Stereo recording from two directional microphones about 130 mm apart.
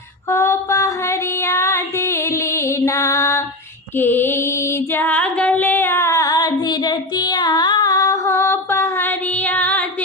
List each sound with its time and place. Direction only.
0.3 s music: 20° left (ahead or behind)